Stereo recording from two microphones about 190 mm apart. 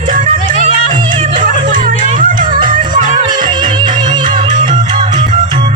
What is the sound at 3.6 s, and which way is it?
Music, 45° right (ahead or behind).